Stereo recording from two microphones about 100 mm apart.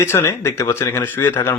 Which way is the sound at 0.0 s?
25° left (ahead or behind).